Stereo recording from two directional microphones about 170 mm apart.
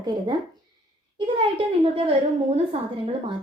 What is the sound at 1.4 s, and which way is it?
Speech, 35° right (ahead or behind).